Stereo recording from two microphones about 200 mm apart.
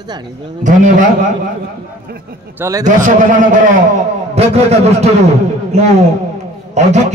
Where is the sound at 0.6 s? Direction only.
40° right (ahead or behind).